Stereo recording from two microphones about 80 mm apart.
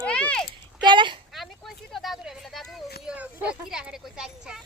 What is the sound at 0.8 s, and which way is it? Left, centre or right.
Speech, right.